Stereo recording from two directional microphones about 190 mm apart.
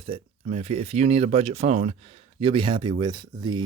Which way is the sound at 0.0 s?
30° right (ahead or behind).